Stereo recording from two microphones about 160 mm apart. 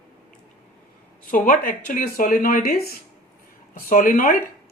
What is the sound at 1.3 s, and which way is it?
Speech, 65° left (ahead or behind).